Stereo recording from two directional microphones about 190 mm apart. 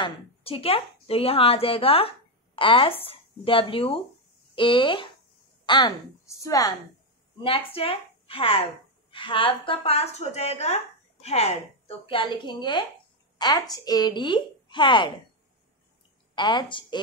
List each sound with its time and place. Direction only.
0.0 s a woman's voice: 30° left (ahead or behind)
7.4 s a woman's voice: 30° left (ahead or behind)
16.3 s speech: 25° left (ahead or behind)